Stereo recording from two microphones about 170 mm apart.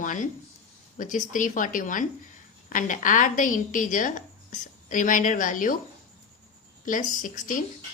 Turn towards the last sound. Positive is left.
turn(degrees=50)  # may be behind; listen again after turning